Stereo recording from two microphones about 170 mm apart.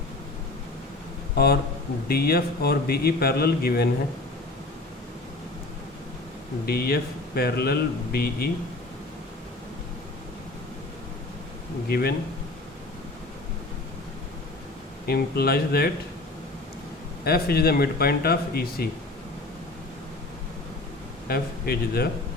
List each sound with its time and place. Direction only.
2.0 s a man's voice: 60° left (ahead or behind)
6.7 s speech: 65° left (ahead or behind)
11.9 s speech: 70° left (ahead or behind)
15.0 s a man's voice: 65° left (ahead or behind)
17.2 s a man's voice: 65° left (ahead or behind)
21.2 s a man's voice: 65° left (ahead or behind)